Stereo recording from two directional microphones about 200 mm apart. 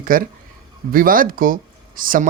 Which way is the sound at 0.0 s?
45° right (ahead or behind).